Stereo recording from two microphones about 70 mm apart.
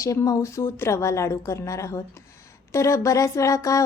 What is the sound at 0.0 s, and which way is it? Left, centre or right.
Speech, left.